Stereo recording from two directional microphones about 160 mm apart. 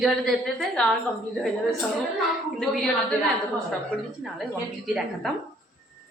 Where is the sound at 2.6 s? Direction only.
Centre (ahead or behind).